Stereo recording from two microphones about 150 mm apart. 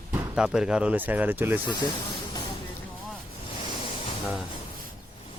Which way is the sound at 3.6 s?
40° left (ahead or behind).